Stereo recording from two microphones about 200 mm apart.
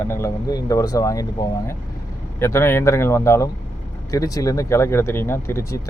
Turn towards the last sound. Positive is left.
turn(degrees=15)  # may be behind; listen again after turning